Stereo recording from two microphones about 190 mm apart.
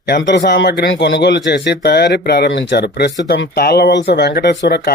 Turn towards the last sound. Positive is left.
turn(degrees=60)  # may be behind; listen again after turning